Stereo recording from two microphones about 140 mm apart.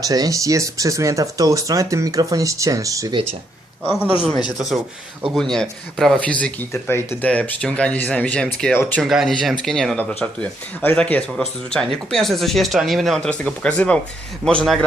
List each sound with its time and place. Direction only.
0.0 s speech: 25° right (ahead or behind)
4.3 s speech: centre (ahead or behind)